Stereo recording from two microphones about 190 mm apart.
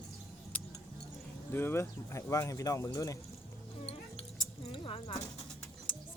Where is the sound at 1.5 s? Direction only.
10° left (ahead or behind).